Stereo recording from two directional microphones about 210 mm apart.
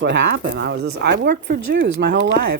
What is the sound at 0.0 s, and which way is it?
Speech, 55° right (ahead or behind).